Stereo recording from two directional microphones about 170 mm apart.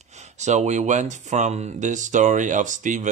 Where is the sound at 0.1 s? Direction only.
45° right (ahead or behind).